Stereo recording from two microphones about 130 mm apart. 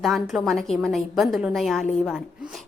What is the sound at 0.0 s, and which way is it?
A woman's voice, centre (ahead or behind).